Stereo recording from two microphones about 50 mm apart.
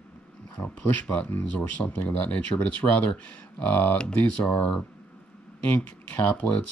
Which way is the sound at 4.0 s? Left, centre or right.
Centre.